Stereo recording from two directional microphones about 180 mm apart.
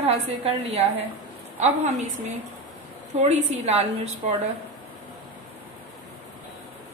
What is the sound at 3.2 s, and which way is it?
Speech, 40° right (ahead or behind).